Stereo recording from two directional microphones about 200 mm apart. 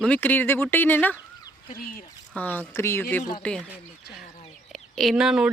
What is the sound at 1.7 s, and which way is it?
Speech, 45° left (ahead or behind).